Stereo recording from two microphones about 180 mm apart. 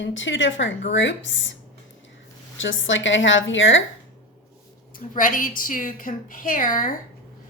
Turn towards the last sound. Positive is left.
turn(degrees=50)  # may be behind; listen again after turning